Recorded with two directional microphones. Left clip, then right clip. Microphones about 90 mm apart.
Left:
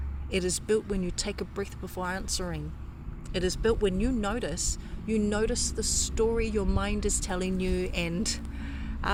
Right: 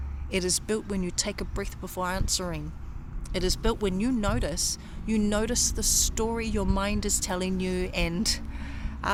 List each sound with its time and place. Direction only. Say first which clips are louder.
0.3 s speech: even; 40° right (ahead or behind)
5.1 s speech: right 1 dB; 65° right (ahead or behind); by 8.1 s 50° right (ahead or behind)
8.2 s a sound: right 4 dB; 50° right (ahead or behind)